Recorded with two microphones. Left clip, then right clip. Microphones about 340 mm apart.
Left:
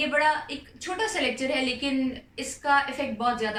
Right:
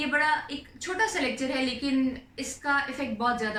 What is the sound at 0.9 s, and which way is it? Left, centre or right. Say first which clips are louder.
Speech: even; centre.